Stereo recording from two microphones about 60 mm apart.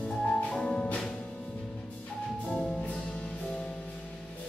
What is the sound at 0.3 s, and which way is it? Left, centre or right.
Music, centre.